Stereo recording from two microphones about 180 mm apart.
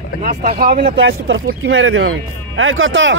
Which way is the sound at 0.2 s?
55° right (ahead or behind).